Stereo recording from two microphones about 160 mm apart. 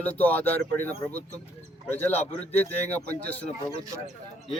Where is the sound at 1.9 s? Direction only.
10° left (ahead or behind).